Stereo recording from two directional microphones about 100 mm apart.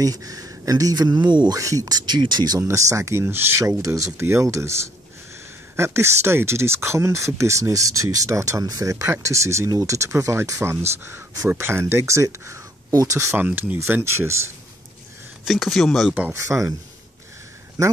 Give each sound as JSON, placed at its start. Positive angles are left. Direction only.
{"t": 0.0, "sound": "speech", "side_deg": -35}
{"t": 1.6, "sound": "speech", "side_deg": -35}
{"t": 2.7, "sound": "speech", "side_deg": -30}
{"t": 3.6, "sound": "speech", "side_deg": -30}
{"t": 13.4, "sound": "speech", "side_deg": -15}
{"t": 15.4, "sound": "speech", "side_deg": 0}
{"t": 16.3, "sound": "speech", "side_deg": -30}